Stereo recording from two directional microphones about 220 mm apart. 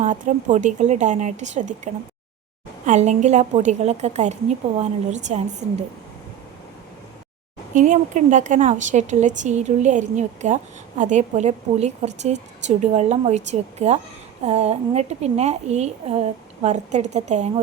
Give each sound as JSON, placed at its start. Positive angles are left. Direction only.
{"t": 0.0, "sound": "speech", "side_deg": -35}
{"t": 7.7, "sound": "a woman's voice", "side_deg": -35}